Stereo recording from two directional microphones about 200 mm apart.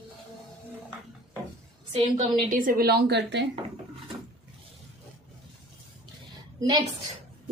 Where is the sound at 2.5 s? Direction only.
45° right (ahead or behind); by 3.4 s 60° right (ahead or behind).